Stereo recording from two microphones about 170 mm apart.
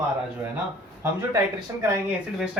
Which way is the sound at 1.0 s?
15° right (ahead or behind).